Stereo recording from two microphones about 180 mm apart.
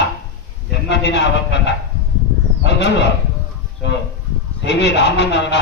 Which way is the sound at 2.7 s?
75° left (ahead or behind).